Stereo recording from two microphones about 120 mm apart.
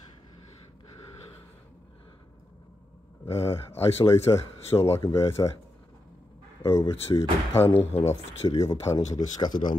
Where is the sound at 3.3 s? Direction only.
25° left (ahead or behind).